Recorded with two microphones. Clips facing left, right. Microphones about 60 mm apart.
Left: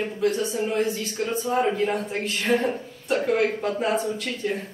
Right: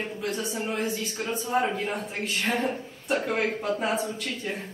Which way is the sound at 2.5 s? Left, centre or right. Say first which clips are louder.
Left 7 dB; centre.